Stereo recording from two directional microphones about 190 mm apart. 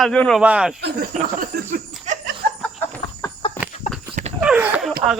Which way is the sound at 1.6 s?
40° right (ahead or behind).